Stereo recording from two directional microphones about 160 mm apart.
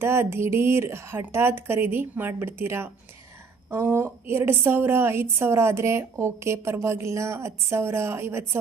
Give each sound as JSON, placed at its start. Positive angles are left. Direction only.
{"t": 0.0, "sound": "a woman's voice", "side_deg": -15}